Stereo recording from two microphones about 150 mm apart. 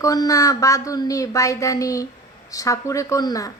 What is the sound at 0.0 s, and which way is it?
A woman's voice, 25° left (ahead or behind).